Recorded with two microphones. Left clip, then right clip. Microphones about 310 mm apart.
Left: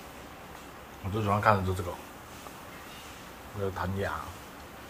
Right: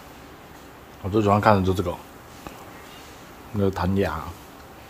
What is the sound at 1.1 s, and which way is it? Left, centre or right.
Speech, right.